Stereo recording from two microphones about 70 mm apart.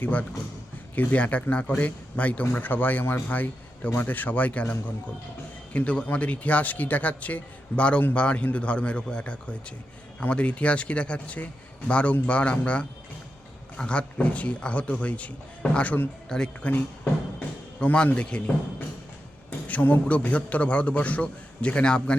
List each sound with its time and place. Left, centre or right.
0.0 s a man's voice: left
16.3 s speech: centre
17.7 s a man's voice: centre